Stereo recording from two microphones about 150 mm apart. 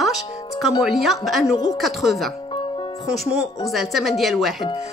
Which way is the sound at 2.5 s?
35° left (ahead or behind).